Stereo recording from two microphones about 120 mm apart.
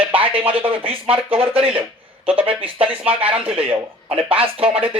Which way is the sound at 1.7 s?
50° right (ahead or behind).